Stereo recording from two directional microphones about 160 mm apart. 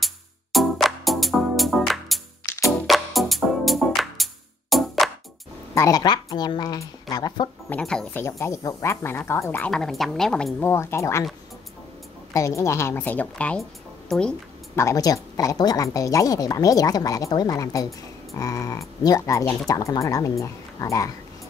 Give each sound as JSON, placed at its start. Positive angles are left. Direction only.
{"t": 0.0, "sound": "music", "side_deg": 0}
{"t": 5.8, "sound": "speech", "side_deg": 20}
{"t": 7.7, "sound": "a woman's voice", "side_deg": 5}
{"t": 10.7, "sound": "speech", "side_deg": 15}
{"t": 12.4, "sound": "speech", "side_deg": 20}
{"t": 14.8, "sound": "speech", "side_deg": 20}